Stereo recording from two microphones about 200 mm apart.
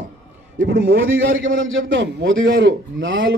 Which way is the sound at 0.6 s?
50° right (ahead or behind).